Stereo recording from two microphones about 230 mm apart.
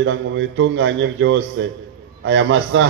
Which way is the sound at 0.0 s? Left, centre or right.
Right.